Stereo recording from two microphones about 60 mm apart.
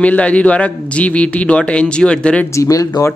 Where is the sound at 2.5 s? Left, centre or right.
Left.